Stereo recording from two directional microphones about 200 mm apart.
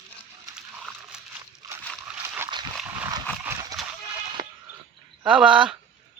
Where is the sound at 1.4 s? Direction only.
15° right (ahead or behind).